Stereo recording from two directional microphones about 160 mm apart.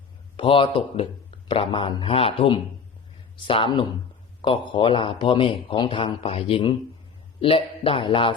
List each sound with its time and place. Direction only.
0.3 s a man's voice: 30° left (ahead or behind)